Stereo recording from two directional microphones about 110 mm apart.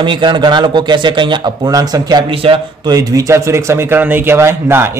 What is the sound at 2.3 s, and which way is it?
Speech, 55° right (ahead or behind).